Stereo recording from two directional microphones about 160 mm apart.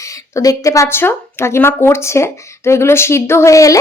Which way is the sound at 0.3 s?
20° left (ahead or behind).